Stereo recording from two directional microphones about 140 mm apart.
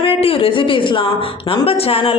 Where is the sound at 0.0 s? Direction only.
45° left (ahead or behind).